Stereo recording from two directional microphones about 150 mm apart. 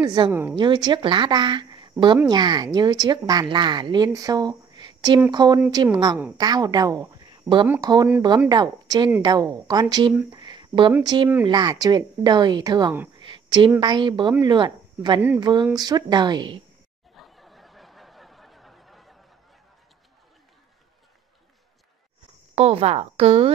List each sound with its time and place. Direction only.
0.0 s a woman's voice: 25° right (ahead or behind)
0.3 s speech: 15° right (ahead or behind)
0.6 s a woman's voice: 30° right (ahead or behind)
10.3 s a sound: 30° right (ahead or behind)
11.1 s a woman's voice: 30° right (ahead or behind)
13.2 s a sound: 30° right (ahead or behind)
13.7 s a woman's voice: 30° right (ahead or behind)
17.1 s a sound: centre (ahead or behind)
22.6 s a woman's voice: 40° right (ahead or behind)